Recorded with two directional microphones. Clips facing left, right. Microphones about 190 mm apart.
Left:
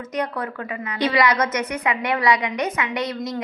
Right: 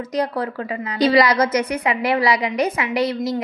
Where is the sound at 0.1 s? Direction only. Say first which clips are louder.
Right 3 dB; 35° right (ahead or behind).